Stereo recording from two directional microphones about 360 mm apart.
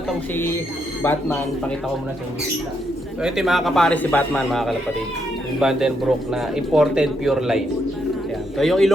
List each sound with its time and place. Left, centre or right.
0.1 s a man's voice: centre
3.2 s a man's voice: centre